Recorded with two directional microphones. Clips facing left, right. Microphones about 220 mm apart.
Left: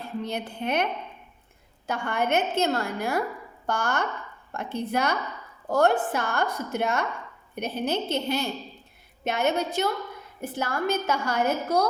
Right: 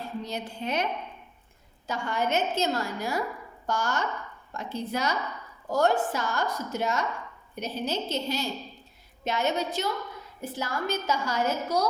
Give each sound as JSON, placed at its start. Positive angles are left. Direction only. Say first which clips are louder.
{"t": 0.2, "sound": "a woman's voice", "louder": "left 5 dB", "side_deg": 55}
{"t": 1.9, "sound": "a woman's voice", "louder": "left 2 dB", "side_deg": 55}